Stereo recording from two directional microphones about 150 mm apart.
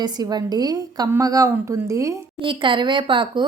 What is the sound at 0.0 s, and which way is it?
Speech, 25° right (ahead or behind).